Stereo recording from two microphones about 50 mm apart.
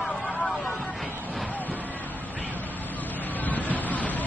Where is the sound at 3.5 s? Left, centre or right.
Left.